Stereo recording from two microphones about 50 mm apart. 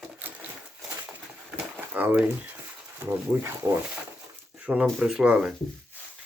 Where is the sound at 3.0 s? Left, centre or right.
Right.